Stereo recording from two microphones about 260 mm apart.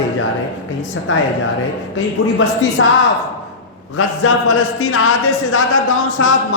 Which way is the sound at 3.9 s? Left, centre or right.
Left.